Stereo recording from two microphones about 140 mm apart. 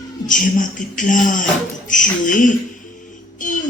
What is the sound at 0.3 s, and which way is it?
Speech, 65° left (ahead or behind).